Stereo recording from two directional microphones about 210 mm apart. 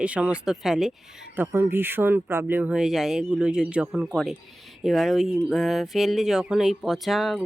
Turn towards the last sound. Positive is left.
turn(degrees=0)  # may be behind; listen again after turning